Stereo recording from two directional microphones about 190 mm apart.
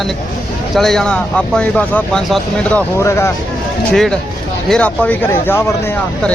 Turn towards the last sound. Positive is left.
turn(degrees=10)  # may be behind; listen again after turning